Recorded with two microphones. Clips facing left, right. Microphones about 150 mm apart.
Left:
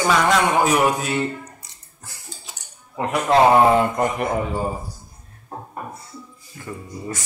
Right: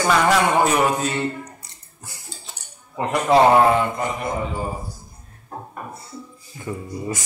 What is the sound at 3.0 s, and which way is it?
Speech, centre (ahead or behind).